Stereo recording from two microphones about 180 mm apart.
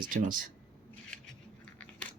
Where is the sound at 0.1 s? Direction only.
50° right (ahead or behind).